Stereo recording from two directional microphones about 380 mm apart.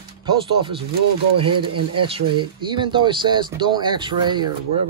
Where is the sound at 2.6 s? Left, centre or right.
Centre.